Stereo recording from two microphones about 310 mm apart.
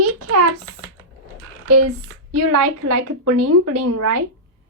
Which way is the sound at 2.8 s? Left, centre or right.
Right.